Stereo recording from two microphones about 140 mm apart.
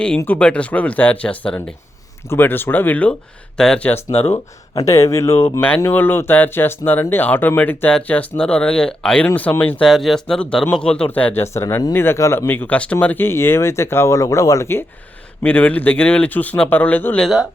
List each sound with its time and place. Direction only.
0.2 s speech: 10° left (ahead or behind)
4.1 s speech: 45° left (ahead or behind)
4.7 s speech: 25° left (ahead or behind)
17.2 s speech: centre (ahead or behind)